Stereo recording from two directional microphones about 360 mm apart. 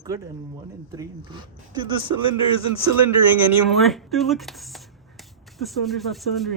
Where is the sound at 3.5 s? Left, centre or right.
Centre.